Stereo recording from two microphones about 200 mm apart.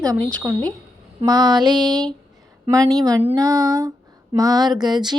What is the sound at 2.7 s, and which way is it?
Speech, 15° right (ahead or behind).